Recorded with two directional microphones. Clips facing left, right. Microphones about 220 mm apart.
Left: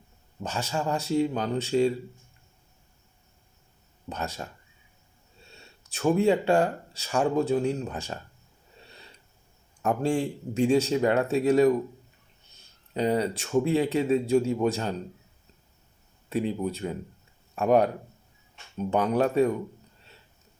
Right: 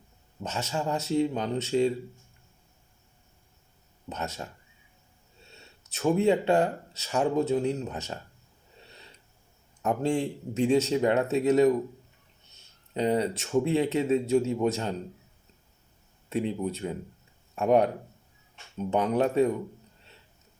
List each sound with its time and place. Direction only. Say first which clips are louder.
0.4 s speech: left 1 dB; 25° right (ahead or behind)
4.1 s speech: left 1 dB; 25° right (ahead or behind)
5.5 s speech: left 1 dB; 25° right (ahead or behind)
9.8 s speech: left 1 dB; 20° right (ahead or behind)
16.3 s speech: left 1 dB; 25° right (ahead or behind)